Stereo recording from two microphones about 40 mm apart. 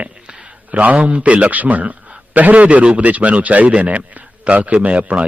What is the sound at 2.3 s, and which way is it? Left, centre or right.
A man's voice, right.